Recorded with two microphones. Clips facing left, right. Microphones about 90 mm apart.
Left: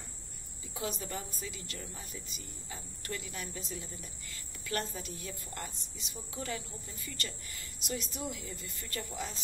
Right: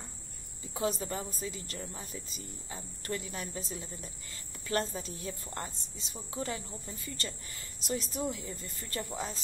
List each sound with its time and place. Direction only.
0.7 s speech: 35° right (ahead or behind)